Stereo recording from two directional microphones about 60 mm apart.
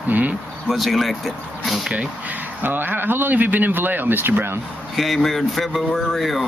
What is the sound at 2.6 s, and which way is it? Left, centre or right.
Speech, right.